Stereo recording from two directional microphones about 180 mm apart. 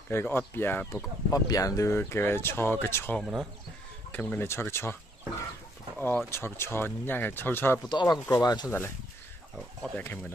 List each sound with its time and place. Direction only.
0.1 s speech: 10° left (ahead or behind)
5.9 s speech: 10° left (ahead or behind)
7.9 s speech: 25° left (ahead or behind)
9.9 s speech: 10° left (ahead or behind)